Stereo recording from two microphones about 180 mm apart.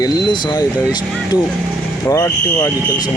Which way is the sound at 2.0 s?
15° left (ahead or behind).